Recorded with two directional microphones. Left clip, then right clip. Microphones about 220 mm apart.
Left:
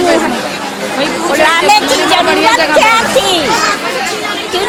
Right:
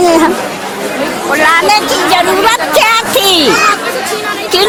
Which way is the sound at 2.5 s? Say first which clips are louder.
Left 1 dB; 35° right (ahead or behind).